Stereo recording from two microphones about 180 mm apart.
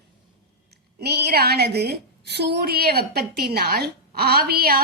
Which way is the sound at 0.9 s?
65° right (ahead or behind).